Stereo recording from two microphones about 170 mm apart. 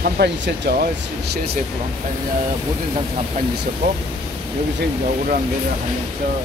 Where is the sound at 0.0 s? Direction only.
75° right (ahead or behind).